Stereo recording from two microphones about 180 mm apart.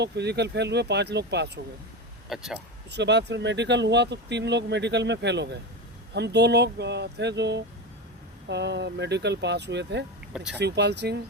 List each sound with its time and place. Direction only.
0.0 s speech: 70° right (ahead or behind)
2.3 s speech: centre (ahead or behind)
2.9 s speech: 75° right (ahead or behind)
10.3 s speech: 5° right (ahead or behind)
10.6 s speech: 70° right (ahead or behind)